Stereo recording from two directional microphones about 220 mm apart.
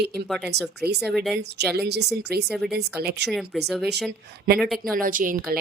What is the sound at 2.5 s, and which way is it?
Speech, 5° right (ahead or behind).